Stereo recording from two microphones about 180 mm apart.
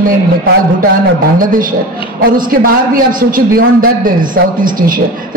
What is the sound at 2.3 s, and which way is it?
A man's voice, 50° right (ahead or behind).